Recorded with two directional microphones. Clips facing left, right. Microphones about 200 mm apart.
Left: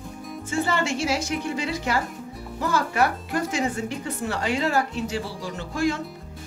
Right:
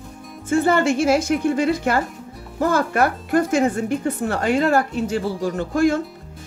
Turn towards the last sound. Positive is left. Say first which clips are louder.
# right 7 dB
turn(degrees=-50)  # may be behind; listen again after turning